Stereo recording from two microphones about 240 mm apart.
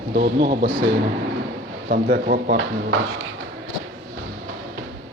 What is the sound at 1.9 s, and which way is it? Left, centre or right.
Speech, right.